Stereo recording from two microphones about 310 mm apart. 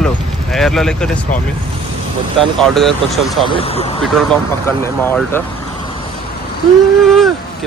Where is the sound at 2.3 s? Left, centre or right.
Centre.